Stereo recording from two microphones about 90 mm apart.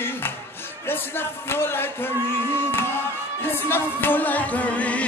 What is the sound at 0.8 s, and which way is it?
Speech, 25° left (ahead or behind).